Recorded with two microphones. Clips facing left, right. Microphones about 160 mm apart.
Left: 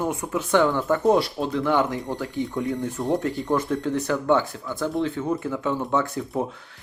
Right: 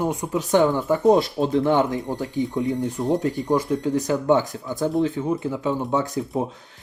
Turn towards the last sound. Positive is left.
turn(degrees=-20)  # may be behind; listen again after turning